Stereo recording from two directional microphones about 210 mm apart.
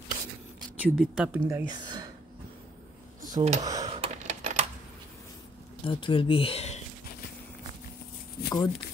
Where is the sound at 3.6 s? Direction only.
15° right (ahead or behind).